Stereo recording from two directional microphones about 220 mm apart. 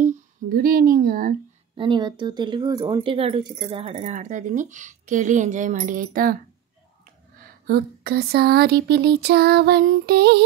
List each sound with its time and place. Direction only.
0.0 s speech: 35° right (ahead or behind)
1.8 s speech: 20° right (ahead or behind); by 6.3 s 40° right (ahead or behind)
7.6 s a sound: 45° right (ahead or behind)